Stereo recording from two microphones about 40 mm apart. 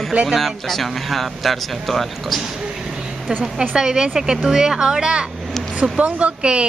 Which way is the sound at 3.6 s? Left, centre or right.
Centre.